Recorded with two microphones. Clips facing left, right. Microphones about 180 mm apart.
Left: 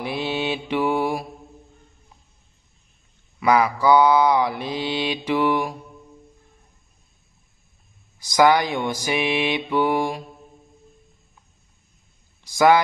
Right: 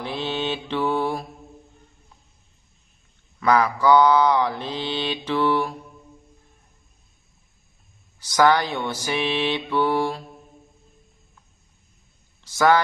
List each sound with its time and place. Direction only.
0.0 s mantra: 10° left (ahead or behind)
3.3 s mantra: 10° left (ahead or behind)
8.2 s mantra: 10° left (ahead or behind)
12.4 s speech: 15° left (ahead or behind)